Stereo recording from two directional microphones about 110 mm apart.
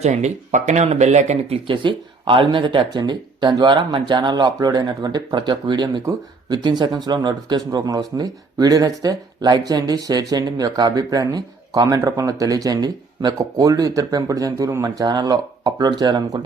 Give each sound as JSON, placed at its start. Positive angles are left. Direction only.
{"t": 0.0, "sound": "speech", "side_deg": -90}
{"t": 1.6, "sound": "speech", "side_deg": -50}